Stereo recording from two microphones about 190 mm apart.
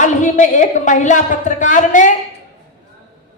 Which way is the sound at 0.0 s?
40° left (ahead or behind).